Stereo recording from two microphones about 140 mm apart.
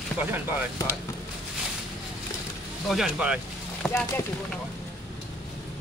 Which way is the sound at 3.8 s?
15° left (ahead or behind).